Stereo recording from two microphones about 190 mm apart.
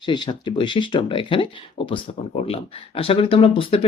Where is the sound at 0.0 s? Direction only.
25° left (ahead or behind).